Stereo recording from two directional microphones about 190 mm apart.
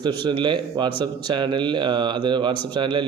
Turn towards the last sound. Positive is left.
turn(degrees=-25)  # may be behind; listen again after turning